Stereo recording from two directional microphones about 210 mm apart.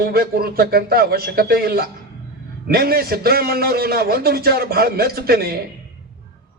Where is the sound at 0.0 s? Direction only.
45° right (ahead or behind).